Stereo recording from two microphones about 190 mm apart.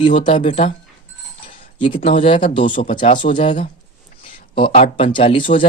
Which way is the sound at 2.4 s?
40° left (ahead or behind).